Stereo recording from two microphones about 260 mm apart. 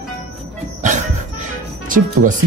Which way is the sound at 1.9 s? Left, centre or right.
Right.